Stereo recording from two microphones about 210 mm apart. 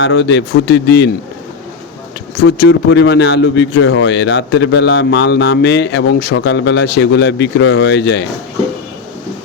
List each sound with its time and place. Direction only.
0.0 s a man's voice: 60° left (ahead or behind)
2.3 s a man's voice: 55° left (ahead or behind)